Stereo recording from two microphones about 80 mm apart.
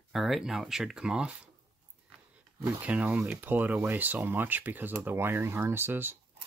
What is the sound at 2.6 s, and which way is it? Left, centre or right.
Speech, centre.